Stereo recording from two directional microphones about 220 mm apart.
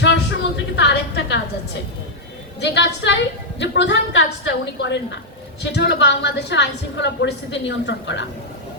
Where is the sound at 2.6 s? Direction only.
50° left (ahead or behind).